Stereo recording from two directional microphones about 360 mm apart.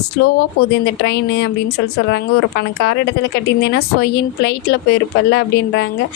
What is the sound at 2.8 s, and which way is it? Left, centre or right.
A woman's voice, left.